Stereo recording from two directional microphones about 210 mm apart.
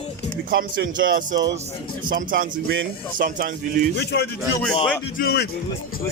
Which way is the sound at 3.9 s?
50° left (ahead or behind).